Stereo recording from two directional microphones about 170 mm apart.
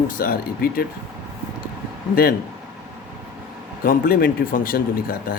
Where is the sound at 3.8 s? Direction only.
55° left (ahead or behind).